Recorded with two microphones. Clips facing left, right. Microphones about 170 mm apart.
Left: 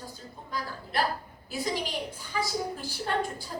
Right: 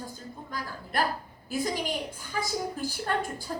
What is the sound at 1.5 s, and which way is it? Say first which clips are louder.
A woman's voice: right 2 dB; 45° right (ahead or behind).